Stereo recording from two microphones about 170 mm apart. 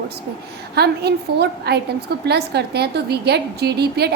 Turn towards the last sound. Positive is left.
turn(degrees=-75)  # may be behind; listen again after turning